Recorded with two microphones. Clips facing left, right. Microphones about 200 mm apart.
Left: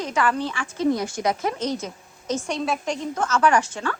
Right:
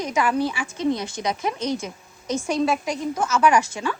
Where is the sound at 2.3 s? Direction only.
10° right (ahead or behind).